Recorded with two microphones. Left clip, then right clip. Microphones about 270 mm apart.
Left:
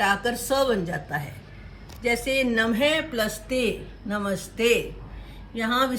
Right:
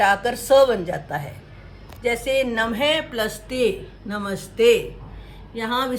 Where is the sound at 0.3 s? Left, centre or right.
Right.